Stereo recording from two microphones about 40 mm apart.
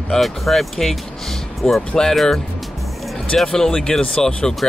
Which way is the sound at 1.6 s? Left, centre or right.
Centre.